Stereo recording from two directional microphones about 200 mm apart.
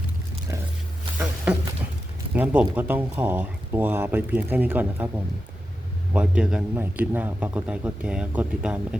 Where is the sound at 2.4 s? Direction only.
10° right (ahead or behind).